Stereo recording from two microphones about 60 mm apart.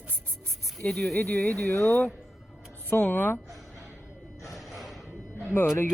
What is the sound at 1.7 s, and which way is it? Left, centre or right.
Speech, left.